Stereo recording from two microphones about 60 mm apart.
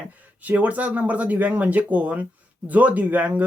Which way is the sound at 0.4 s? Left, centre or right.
Right.